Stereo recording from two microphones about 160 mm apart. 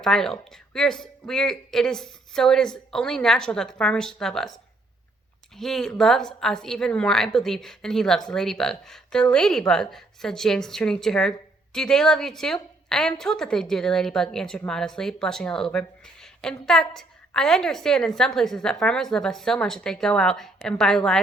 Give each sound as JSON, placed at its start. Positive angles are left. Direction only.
{"t": 0.0, "sound": "a woman's voice", "side_deg": 5}
{"t": 5.5, "sound": "a woman's voice", "side_deg": 5}